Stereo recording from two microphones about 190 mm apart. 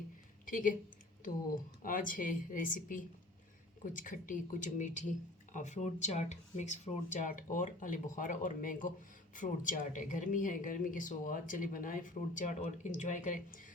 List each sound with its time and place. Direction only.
0.4 s speech: 45° left (ahead or behind)
1.8 s speech: 45° left (ahead or behind)